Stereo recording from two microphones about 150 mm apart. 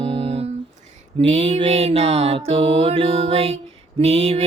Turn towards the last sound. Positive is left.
turn(degrees=-40)  # may be behind; listen again after turning